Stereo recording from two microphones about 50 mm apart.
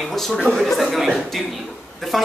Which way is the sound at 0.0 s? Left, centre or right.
Centre.